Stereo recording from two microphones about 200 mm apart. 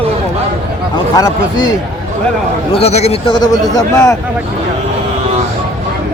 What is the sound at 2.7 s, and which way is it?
A man's voice, 30° left (ahead or behind).